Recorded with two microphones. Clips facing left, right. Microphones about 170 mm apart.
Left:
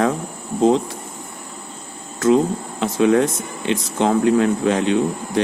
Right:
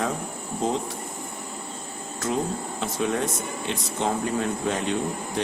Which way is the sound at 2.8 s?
90° left.